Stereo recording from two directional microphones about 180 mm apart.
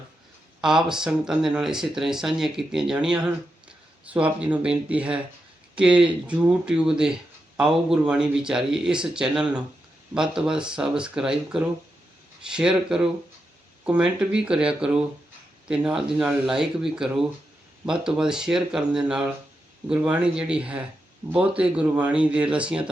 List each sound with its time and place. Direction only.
0.6 s speech: 5° right (ahead or behind)